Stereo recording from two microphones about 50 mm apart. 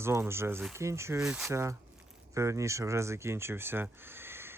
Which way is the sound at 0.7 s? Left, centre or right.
Right.